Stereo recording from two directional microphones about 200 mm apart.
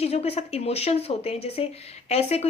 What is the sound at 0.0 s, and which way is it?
A woman's voice, 30° left (ahead or behind).